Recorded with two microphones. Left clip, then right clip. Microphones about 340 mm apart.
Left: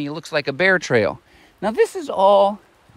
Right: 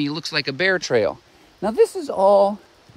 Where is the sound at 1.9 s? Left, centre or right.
Left.